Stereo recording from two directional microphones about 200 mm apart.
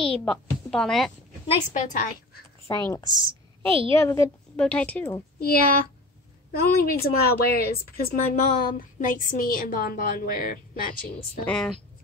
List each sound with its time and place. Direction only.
0.2 s a woman's voice: 5° left (ahead or behind)
1.5 s a woman's voice: 40° left (ahead or behind)
2.7 s a woman's voice: 15° left (ahead or behind)
3.1 s a woman's voice: 25° right (ahead or behind)
4.0 s a woman's voice: 15° left (ahead or behind)
5.4 s a woman's voice: 50° left (ahead or behind)
11.4 s speech: 5° left (ahead or behind)